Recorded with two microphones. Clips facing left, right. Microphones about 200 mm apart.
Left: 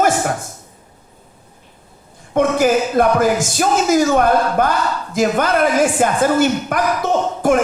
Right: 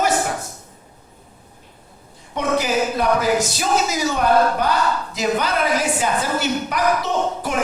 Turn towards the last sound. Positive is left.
turn(degrees=50)  # may be behind; listen again after turning